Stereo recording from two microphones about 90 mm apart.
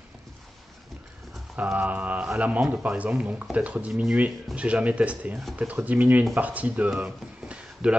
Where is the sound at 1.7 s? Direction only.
15° right (ahead or behind).